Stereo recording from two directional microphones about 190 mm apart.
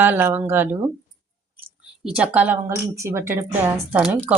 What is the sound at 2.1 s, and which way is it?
Speech, 5° right (ahead or behind).